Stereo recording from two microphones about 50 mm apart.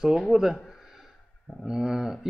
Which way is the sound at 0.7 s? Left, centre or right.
Centre.